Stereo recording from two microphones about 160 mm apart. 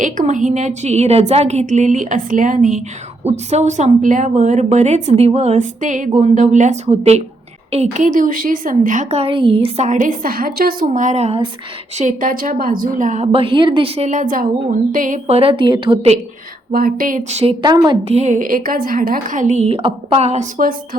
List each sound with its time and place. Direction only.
0.0 s a woman's voice: 55° right (ahead or behind)
10.8 s a woman's voice: 50° right (ahead or behind)
11.9 s a woman's voice: 55° right (ahead or behind)
13.2 s a woman's voice: 35° right (ahead or behind)
14.1 s a woman's voice: 55° right (ahead or behind)
15.4 s a woman's voice: 35° right (ahead or behind)
16.7 s a woman's voice: 60° right (ahead or behind); by 17.5 s 45° right (ahead or behind)
17.6 s a woman's voice: 25° right (ahead or behind)
18.1 s a woman's voice: 45° right (ahead or behind)